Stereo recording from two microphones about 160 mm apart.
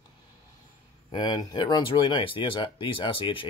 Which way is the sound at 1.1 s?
25° left (ahead or behind).